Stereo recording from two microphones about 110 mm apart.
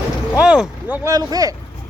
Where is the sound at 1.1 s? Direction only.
35° right (ahead or behind).